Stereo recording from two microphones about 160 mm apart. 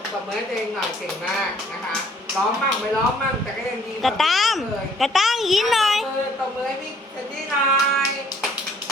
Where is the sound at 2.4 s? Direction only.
Centre (ahead or behind).